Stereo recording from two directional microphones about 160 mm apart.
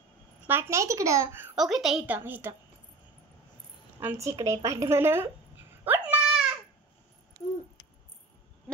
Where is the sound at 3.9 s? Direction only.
15° right (ahead or behind).